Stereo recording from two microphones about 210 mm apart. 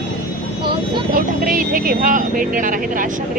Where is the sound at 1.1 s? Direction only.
40° right (ahead or behind).